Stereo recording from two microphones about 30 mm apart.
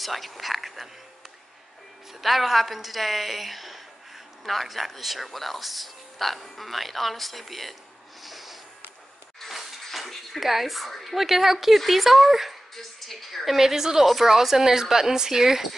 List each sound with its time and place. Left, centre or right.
0.0 s speech: centre
2.2 s speech: centre
8.2 s snort: centre
9.8 s a sound: centre
11.1 s speech: centre
13.7 s speech: centre